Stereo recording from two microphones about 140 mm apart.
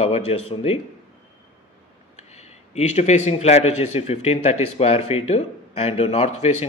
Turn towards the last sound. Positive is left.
turn(degrees=50)  # may be behind; listen again after turning